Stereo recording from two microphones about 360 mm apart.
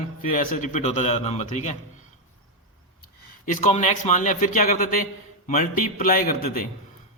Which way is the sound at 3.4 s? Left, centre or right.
Centre.